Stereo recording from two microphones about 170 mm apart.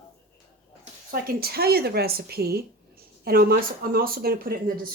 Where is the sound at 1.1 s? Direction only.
65° right (ahead or behind).